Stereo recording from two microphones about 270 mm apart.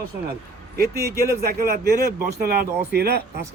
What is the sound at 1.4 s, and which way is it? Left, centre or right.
Speech, right.